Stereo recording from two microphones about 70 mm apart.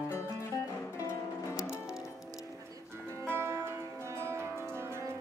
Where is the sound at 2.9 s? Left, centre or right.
Right.